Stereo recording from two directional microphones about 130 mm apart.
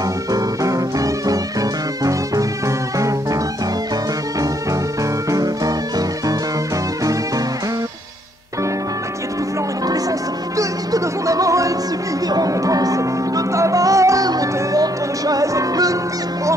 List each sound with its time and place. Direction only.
0.3 s music: 25° right (ahead or behind)
10.6 s music: 25° right (ahead or behind)